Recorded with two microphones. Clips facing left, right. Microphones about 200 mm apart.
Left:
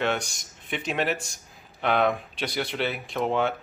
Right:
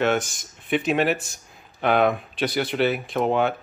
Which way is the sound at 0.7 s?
55° right (ahead or behind).